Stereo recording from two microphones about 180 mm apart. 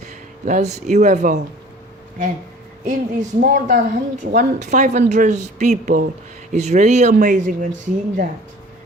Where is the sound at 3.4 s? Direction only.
50° right (ahead or behind).